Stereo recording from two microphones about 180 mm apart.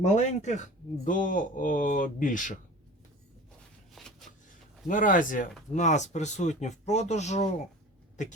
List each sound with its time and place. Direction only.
0.0 s speech: 40° left (ahead or behind)
3.9 s a sound: centre (ahead or behind)
4.9 s speech: 50° left (ahead or behind)